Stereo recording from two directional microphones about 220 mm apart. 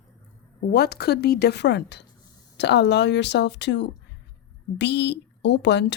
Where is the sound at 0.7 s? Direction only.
45° left (ahead or behind).